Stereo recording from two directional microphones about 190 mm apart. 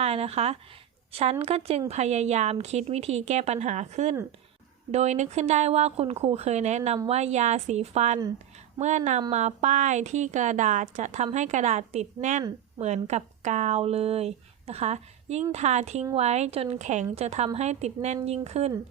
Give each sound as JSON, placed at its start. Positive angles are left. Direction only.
{"t": 0.0, "sound": "a woman's voice", "side_deg": -30}